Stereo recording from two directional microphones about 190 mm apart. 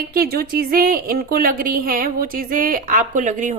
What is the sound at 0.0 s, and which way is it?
Speech, 50° right (ahead or behind).